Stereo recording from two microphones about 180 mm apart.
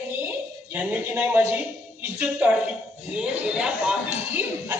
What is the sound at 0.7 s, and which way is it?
A woman's voice, 10° right (ahead or behind).